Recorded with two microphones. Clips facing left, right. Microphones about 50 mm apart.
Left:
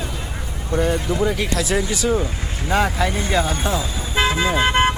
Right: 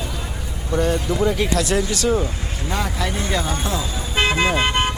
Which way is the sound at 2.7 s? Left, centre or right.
Left.